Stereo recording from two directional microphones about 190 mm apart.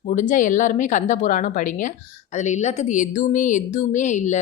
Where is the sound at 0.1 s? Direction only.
45° left (ahead or behind).